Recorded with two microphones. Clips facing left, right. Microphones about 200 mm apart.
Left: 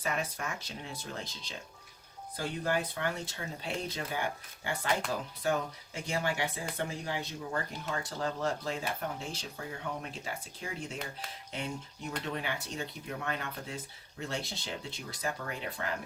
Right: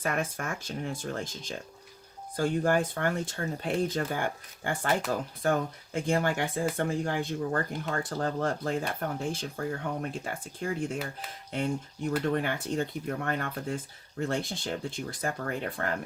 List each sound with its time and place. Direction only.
0.0 s speech: 50° right (ahead or behind)
12.2 s speech: 50° right (ahead or behind)